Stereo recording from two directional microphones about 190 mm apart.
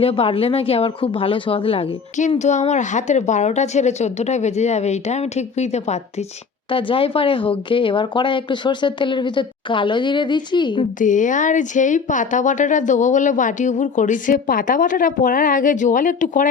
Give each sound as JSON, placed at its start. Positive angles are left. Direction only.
{"t": 0.0, "sound": "speech", "side_deg": 30}
{"t": 11.0, "sound": "speech", "side_deg": 40}